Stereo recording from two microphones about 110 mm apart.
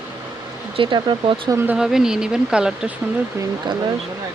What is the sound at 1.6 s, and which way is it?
Speech, 5° right (ahead or behind).